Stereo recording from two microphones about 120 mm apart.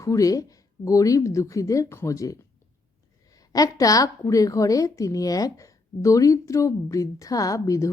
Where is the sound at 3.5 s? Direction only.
30° left (ahead or behind).